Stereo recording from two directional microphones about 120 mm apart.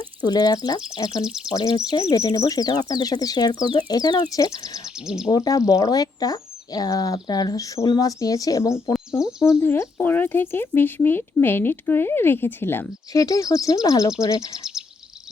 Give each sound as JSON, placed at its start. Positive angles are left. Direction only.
{"t": 0.0, "sound": "speech", "side_deg": 35}
{"t": 1.2, "sound": "speech", "side_deg": -5}
{"t": 1.5, "sound": "speech", "side_deg": 30}
{"t": 4.9, "sound": "speech", "side_deg": -5}
{"t": 5.3, "sound": "speech", "side_deg": 30}
{"t": 12.9, "sound": "speech", "side_deg": 30}